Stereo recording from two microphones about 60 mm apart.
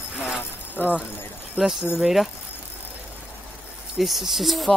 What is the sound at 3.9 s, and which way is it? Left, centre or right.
Speech, centre.